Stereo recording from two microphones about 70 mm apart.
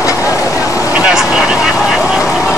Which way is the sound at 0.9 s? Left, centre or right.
Centre.